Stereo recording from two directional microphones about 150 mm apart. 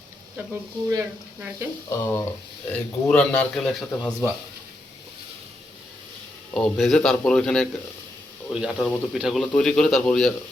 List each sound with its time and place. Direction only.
0.9 s speech: 20° right (ahead or behind)
1.9 s speech: 20° left (ahead or behind); by 4.3 s centre (ahead or behind)
6.5 s speech: centre (ahead or behind)